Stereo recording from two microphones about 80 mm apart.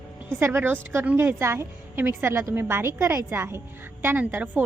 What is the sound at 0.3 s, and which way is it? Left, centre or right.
A woman's voice, right.